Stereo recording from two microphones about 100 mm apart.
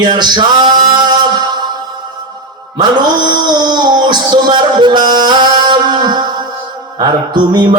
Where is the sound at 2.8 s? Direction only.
45° right (ahead or behind).